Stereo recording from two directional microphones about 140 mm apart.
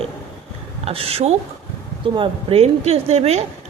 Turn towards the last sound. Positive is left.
turn(degrees=-50)  # may be behind; listen again after turning